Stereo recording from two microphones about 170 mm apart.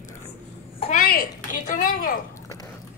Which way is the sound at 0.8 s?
50° left (ahead or behind).